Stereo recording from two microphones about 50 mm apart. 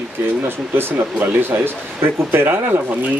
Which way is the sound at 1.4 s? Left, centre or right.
Right.